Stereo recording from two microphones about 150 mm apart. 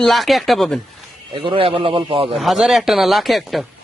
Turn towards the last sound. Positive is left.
turn(degrees=0)  # may be behind; listen again after turning